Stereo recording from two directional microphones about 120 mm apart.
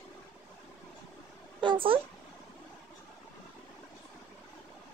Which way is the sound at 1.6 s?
45° right (ahead or behind).